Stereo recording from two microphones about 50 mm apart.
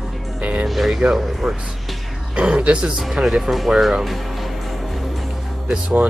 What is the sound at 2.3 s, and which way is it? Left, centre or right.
Speech, right.